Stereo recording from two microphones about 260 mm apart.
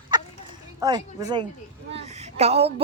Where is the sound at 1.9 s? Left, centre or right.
Right.